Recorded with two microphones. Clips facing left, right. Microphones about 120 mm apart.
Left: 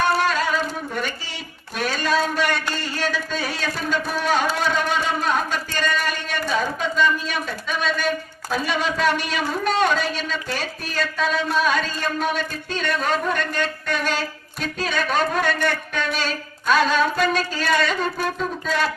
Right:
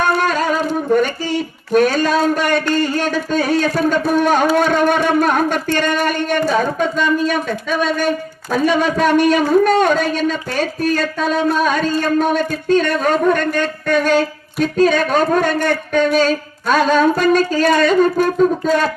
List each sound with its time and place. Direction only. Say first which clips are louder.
0.0 s singing: right 4 dB; 50° right (ahead or behind)
1.7 s speech: right 9 dB; 50° right (ahead or behind)